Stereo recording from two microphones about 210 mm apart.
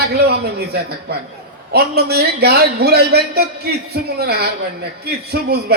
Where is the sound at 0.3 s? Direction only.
50° right (ahead or behind).